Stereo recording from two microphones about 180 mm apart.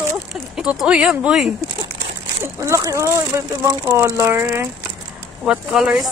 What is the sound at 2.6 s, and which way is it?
Speech, 15° right (ahead or behind).